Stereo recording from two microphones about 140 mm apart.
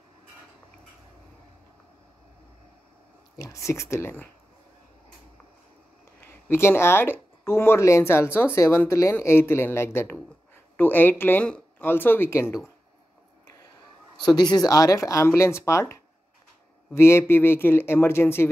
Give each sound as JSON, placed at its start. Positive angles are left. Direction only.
{"t": 3.3, "sound": "speech", "side_deg": 20}
{"t": 6.2, "sound": "speech", "side_deg": 15}
{"t": 14.2, "sound": "speech", "side_deg": 30}